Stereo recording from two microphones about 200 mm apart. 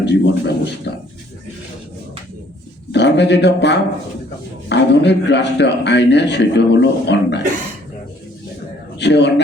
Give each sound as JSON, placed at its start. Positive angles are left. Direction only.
{"t": 0.0, "sound": "a man's voice", "side_deg": 60}
{"t": 2.9, "sound": "a man's voice", "side_deg": 60}
{"t": 9.0, "sound": "speech", "side_deg": 60}